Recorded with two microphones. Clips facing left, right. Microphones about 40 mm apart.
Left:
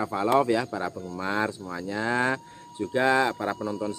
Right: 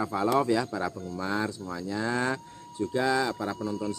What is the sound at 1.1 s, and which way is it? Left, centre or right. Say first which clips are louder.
Speech: left 4 dB; left.